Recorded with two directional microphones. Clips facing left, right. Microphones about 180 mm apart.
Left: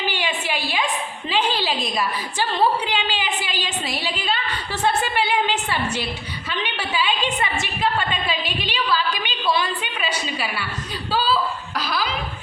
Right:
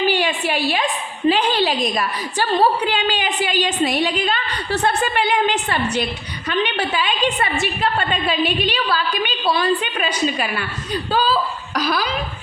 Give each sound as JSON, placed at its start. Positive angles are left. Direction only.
{"t": 0.1, "sound": "a sound", "side_deg": -50}
{"t": 2.9, "sound": "a woman's voice", "side_deg": -45}
{"t": 11.1, "sound": "laughter", "side_deg": -45}